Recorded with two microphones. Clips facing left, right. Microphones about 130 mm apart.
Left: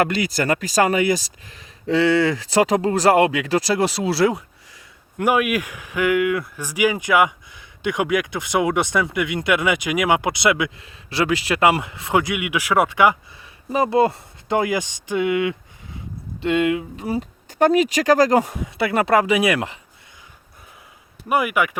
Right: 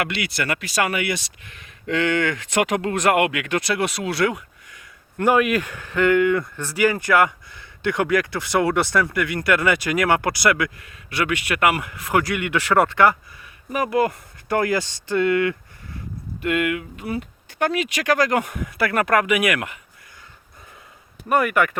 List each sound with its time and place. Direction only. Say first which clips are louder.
0.0 s speech: left 5 dB; 40° left (ahead or behind)
5.1 s speech: right 1 dB; 10° left (ahead or behind)
13.7 s speech: left 3 dB; 30° left (ahead or behind)
16.4 s speech: left 3 dB; 25° left (ahead or behind)
21.2 s speech: right 1 dB; 10° left (ahead or behind)